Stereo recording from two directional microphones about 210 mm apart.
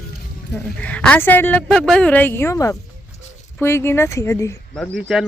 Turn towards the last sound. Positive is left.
turn(degrees=0)  # may be behind; listen again after turning